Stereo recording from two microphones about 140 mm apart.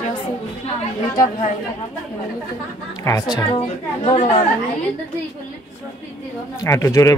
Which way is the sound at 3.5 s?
45° left (ahead or behind).